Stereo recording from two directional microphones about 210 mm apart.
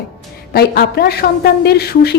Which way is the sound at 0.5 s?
50° left (ahead or behind).